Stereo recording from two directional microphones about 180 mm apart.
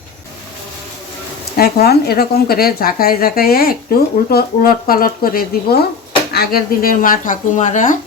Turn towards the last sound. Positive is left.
turn(degrees=45)  # may be behind; listen again after turning